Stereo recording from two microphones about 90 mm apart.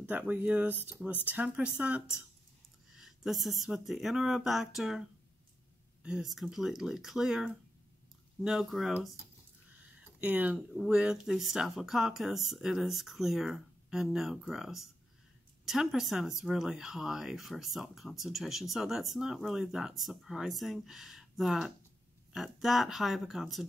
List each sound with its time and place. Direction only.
0.0 s speech: 15° right (ahead or behind)
6.0 s speech: 5° right (ahead or behind)
9.9 s a sound: 15° right (ahead or behind)
10.7 s speech: 5° right (ahead or behind)